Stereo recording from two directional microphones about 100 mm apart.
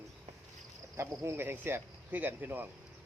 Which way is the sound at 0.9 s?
25° right (ahead or behind).